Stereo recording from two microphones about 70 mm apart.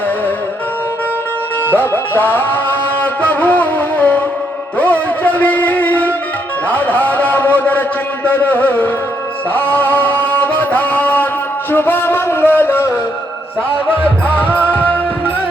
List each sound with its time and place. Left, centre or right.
1.6 s music: left
6.7 s a man's voice: left
9.6 s music: left
14.5 s music: right